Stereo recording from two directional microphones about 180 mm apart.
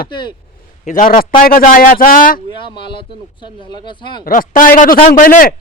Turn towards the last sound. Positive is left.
turn(degrees=50)  # may be behind; listen again after turning